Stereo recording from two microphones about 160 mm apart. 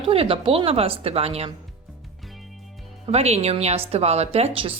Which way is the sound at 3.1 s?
40° right (ahead or behind).